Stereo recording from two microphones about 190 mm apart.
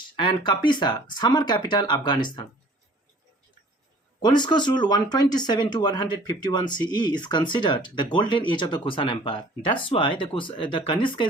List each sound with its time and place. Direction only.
0.2 s speech: 25° left (ahead or behind)
4.2 s speech: 25° left (ahead or behind)